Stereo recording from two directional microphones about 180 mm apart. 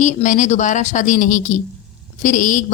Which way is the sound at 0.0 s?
45° left (ahead or behind).